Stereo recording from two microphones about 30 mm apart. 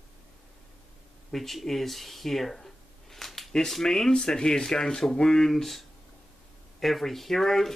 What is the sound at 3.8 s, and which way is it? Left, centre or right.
Speech, centre.